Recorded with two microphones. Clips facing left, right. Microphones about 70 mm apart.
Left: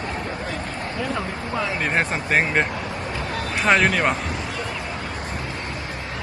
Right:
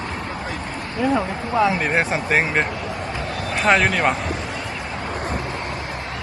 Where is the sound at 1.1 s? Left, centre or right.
Centre.